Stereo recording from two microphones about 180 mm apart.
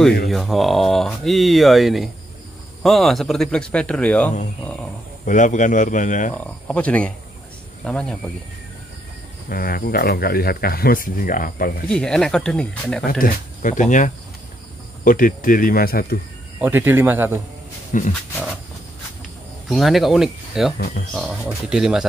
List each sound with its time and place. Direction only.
0.3 s speech: centre (ahead or behind)
5.2 s a man's voice: 45° left (ahead or behind)
6.3 s speech: 5° left (ahead or behind)
9.5 s speech: 55° left (ahead or behind)
11.9 s speech: 5° left (ahead or behind)
13.2 s a man's voice: 45° left (ahead or behind)
16.6 s speech: 10° right (ahead or behind)
17.9 s a man's voice: 45° left (ahead or behind)
19.7 s speech: centre (ahead or behind)